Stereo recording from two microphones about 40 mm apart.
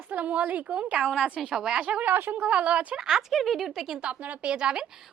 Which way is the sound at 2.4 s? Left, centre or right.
Right.